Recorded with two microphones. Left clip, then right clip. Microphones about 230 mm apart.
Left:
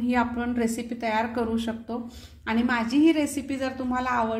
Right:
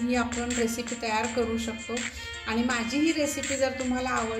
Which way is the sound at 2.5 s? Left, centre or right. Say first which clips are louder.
Left 3 dB; left.